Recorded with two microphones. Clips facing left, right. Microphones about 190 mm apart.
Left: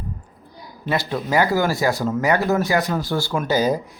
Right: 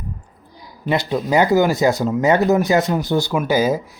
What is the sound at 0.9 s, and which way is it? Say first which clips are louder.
Speech: right 4 dB; 20° right (ahead or behind).